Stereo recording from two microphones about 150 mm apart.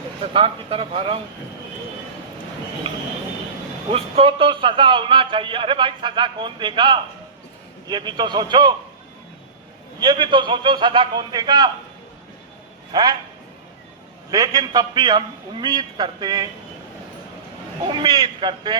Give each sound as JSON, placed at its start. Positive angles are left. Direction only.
{"t": 0.2, "sound": "a man's voice", "side_deg": -35}
{"t": 2.8, "sound": "a man's voice", "side_deg": -40}
{"t": 10.0, "sound": "a man's voice", "side_deg": -30}
{"t": 12.9, "sound": "a man's voice", "side_deg": -25}
{"t": 14.3, "sound": "a man's voice", "side_deg": -25}
{"t": 17.8, "sound": "a man's voice", "side_deg": -30}